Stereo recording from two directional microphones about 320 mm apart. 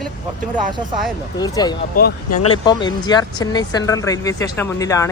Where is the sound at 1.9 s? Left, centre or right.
Left.